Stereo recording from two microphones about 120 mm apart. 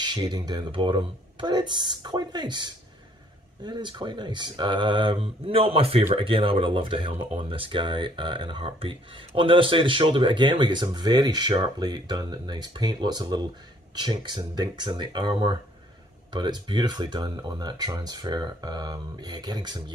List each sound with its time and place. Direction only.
0.0 s speech: 35° right (ahead or behind)